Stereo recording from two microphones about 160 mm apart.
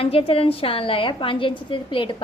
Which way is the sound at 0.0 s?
35° left (ahead or behind).